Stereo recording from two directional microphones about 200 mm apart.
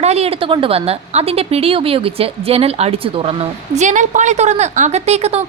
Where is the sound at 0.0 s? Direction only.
30° right (ahead or behind).